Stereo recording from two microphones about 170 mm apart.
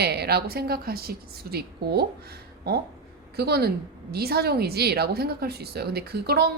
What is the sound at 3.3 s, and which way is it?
A woman's voice, 70° right (ahead or behind).